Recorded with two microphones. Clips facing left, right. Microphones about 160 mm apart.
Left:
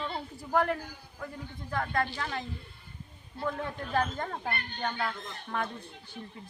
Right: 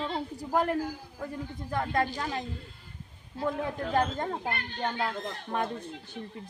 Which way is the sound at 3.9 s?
25° right (ahead or behind).